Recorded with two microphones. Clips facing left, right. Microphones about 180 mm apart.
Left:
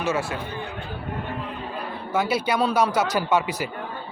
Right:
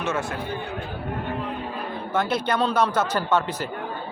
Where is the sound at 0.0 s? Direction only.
5° left (ahead or behind).